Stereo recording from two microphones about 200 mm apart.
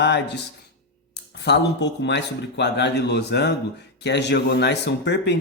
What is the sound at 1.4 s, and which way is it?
A man's voice, 60° left (ahead or behind).